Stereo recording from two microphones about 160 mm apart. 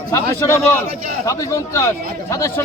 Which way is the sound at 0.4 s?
15° left (ahead or behind).